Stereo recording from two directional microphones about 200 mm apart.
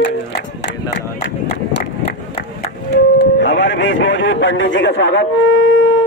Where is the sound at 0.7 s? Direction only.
65° left (ahead or behind).